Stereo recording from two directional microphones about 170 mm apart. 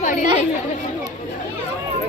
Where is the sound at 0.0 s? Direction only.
50° left (ahead or behind).